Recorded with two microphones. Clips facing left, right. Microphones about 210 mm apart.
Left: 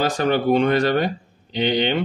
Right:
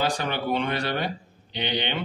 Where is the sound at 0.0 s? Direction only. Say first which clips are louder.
Left 7 dB; 45° left (ahead or behind).